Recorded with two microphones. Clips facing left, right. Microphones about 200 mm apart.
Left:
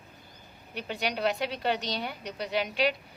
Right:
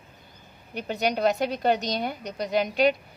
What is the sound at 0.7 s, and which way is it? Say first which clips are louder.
A woman's voice: right 6 dB; 45° right (ahead or behind).